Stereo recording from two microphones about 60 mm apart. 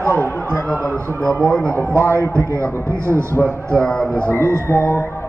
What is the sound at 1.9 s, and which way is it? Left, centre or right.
Speech, right.